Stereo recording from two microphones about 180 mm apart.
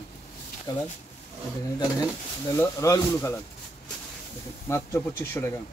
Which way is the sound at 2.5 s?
15° left (ahead or behind).